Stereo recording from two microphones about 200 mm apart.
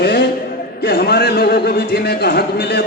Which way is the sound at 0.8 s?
50° left (ahead or behind).